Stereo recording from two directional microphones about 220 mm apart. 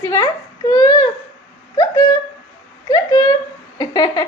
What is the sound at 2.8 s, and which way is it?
A woman's voice, 15° left (ahead or behind).